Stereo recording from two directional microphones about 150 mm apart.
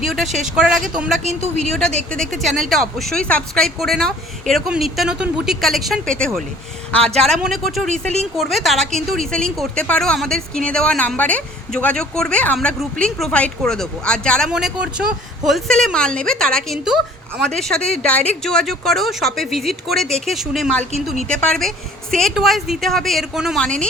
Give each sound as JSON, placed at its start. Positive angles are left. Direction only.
{"t": 0.0, "sound": "speech", "side_deg": 0}